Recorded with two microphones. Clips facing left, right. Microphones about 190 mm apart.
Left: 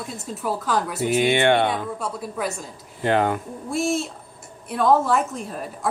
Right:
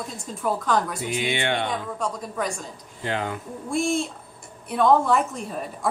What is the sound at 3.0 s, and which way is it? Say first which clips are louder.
Speech: left 8 dB; 55° left (ahead or behind).